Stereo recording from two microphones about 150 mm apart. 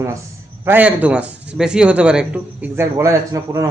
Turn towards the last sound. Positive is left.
turn(degrees=-20)  # may be behind; listen again after turning